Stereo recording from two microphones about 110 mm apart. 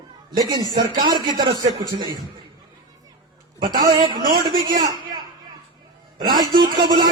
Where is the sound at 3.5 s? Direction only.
35° right (ahead or behind).